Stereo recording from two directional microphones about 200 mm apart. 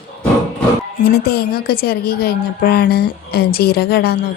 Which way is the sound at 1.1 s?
50° left (ahead or behind).